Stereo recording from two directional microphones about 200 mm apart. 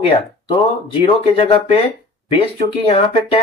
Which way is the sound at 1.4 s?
30° left (ahead or behind).